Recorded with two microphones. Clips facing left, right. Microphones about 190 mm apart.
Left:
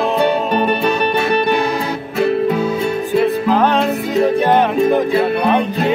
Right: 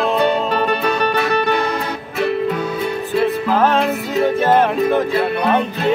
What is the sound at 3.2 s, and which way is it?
Music, centre (ahead or behind).